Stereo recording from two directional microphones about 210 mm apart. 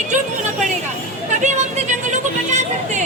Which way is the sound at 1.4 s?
35° right (ahead or behind).